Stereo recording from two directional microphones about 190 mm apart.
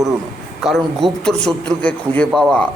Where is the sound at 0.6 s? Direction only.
Centre (ahead or behind).